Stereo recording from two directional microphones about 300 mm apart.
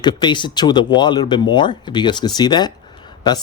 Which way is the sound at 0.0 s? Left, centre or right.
Centre.